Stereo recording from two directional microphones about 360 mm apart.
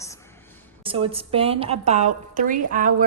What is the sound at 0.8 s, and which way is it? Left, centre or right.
A woman's voice, centre.